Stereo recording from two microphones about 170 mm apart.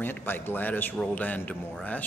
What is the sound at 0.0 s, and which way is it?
A man's voice, 10° left (ahead or behind).